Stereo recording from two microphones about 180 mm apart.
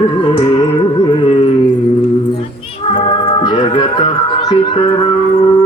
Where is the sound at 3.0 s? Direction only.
25° left (ahead or behind).